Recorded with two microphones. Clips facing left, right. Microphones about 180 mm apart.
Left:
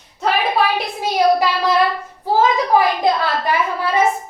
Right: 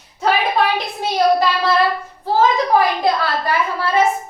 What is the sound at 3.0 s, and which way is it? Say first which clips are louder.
Speech: left 1 dB; 20° left (ahead or behind).